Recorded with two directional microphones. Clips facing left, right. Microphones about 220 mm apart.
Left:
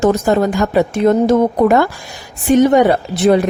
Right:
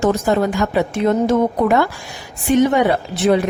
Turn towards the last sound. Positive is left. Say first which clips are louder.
# left 3 dB
turn(degrees=40)  # may be behind; listen again after turning